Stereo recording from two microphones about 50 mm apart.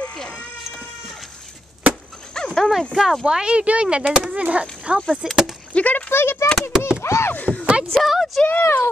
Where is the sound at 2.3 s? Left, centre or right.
Centre.